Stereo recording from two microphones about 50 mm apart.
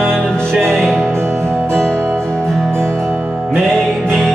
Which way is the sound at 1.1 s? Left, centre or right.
Right.